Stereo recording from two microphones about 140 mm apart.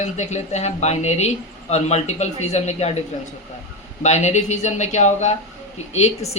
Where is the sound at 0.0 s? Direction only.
55° left (ahead or behind).